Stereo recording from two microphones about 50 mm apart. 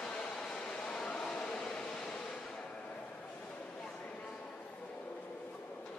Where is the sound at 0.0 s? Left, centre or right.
Centre.